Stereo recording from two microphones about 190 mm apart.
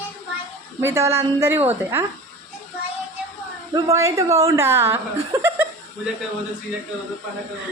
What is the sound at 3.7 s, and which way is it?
Speech, 15° right (ahead or behind).